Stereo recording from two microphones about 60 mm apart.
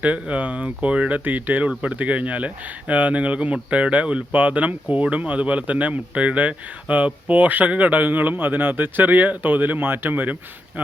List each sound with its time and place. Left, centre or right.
0.0 s speech: right